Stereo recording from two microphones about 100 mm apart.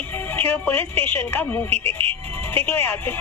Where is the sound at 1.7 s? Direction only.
80° right.